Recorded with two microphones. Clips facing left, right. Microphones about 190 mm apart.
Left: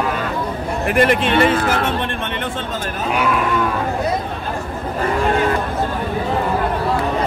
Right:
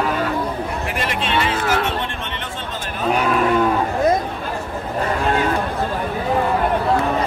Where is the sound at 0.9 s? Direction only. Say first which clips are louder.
Left 9 dB; 55° left (ahead or behind).